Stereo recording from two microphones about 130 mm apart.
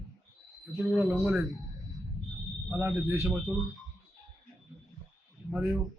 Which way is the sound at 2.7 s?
15° right (ahead or behind).